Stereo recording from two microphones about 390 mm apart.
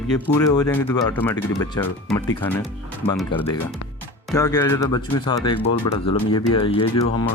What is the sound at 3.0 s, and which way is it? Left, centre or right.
Speech, centre.